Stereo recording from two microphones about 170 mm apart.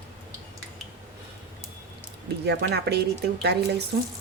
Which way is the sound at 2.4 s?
85° right.